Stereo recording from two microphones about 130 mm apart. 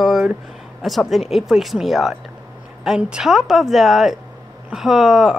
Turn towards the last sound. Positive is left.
turn(degrees=0)  # may be behind; listen again after turning